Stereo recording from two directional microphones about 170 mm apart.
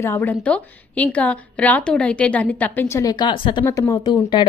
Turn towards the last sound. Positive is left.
turn(degrees=25)  # may be behind; listen again after turning